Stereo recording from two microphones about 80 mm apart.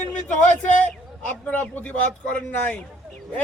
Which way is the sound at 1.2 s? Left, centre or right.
Centre.